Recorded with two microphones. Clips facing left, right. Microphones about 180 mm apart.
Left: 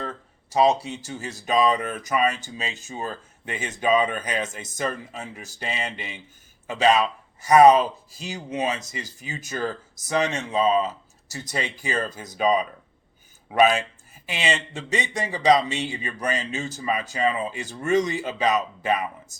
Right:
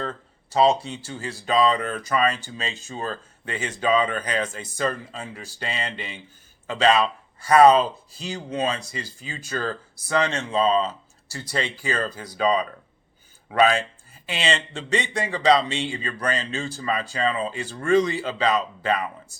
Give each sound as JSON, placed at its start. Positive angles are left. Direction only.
{"t": 0.5, "sound": "speech", "side_deg": 15}